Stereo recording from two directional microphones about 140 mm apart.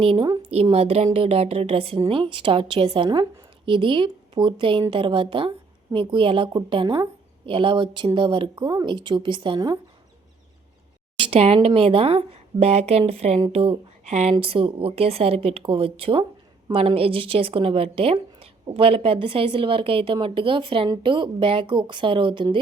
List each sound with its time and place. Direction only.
0.0 s a woman's voice: 40° right (ahead or behind)
11.2 s a woman's voice: 45° right (ahead or behind)